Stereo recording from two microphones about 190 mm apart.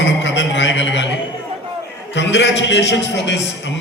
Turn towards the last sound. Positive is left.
turn(degrees=70)  # may be behind; listen again after turning